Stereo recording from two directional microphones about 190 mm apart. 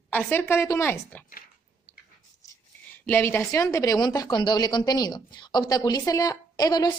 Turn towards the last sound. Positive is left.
turn(degrees=20)  # may be behind; listen again after turning